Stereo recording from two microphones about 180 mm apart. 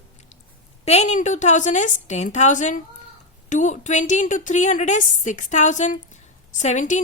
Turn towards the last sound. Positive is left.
turn(degrees=45)  # may be behind; listen again after turning